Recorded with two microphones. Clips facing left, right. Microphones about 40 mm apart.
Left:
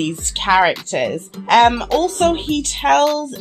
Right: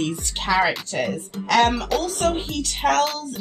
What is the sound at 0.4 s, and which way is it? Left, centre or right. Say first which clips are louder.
Speech: left 6 dB; left.